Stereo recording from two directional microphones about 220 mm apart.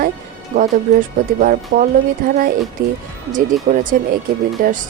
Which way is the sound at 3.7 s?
35° right (ahead or behind).